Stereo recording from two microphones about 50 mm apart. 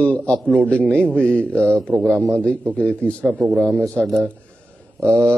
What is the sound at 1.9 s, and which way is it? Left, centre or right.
Speech, right.